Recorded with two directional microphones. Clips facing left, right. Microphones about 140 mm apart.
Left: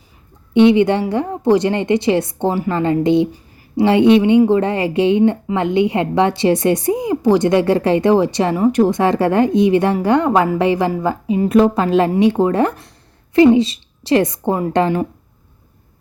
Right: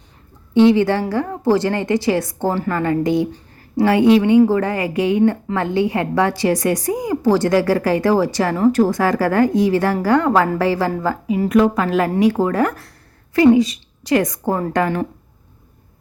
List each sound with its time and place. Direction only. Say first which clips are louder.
0.5 s a woman's voice: left 2 dB; 20° left (ahead or behind)